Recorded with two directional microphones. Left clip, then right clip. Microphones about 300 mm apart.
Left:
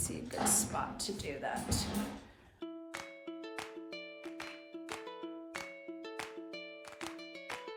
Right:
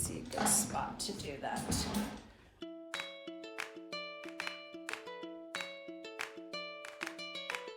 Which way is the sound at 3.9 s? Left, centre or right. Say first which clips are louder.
Right 3 dB; centre.